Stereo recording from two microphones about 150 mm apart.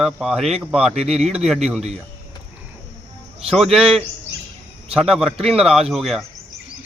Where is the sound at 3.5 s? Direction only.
Centre (ahead or behind).